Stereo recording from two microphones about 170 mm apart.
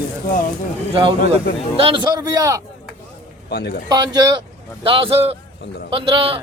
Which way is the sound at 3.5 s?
70° left (ahead or behind).